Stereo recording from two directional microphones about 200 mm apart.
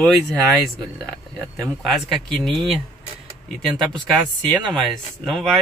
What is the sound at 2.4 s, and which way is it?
Speech, centre (ahead or behind).